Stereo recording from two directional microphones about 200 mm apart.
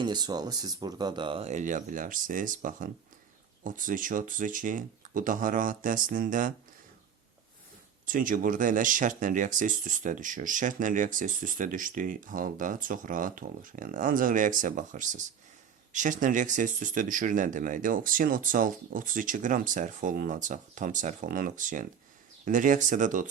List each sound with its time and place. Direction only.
0.0 s speech: 20° right (ahead or behind); by 6.5 s 40° right (ahead or behind)
8.0 s speech: 45° right (ahead or behind)